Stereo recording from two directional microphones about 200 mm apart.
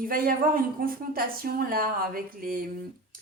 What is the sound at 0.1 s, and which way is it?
A woman's voice, 45° right (ahead or behind).